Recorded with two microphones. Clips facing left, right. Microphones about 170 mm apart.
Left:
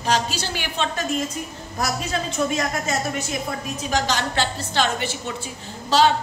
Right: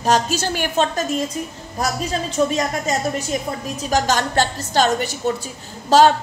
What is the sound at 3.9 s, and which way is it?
A woman's voice, 45° right (ahead or behind).